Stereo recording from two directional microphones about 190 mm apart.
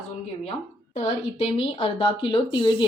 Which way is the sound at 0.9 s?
30° left (ahead or behind).